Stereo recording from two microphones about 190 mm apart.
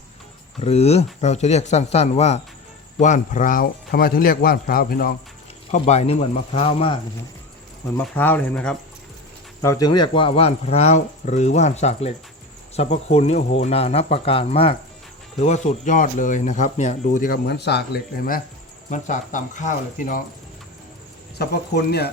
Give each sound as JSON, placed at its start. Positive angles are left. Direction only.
{"t": 0.6, "sound": "speech", "side_deg": 35}
{"t": 5.7, "sound": "speech", "side_deg": 35}
{"t": 7.9, "sound": "speech", "side_deg": 10}
{"t": 9.6, "sound": "speech", "side_deg": 20}
{"t": 21.3, "sound": "speech", "side_deg": 60}